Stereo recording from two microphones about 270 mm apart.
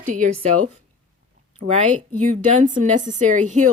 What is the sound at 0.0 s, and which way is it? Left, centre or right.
Speech, right.